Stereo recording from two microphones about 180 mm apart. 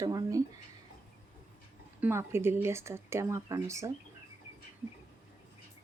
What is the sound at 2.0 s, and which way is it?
Speech, 15° right (ahead or behind).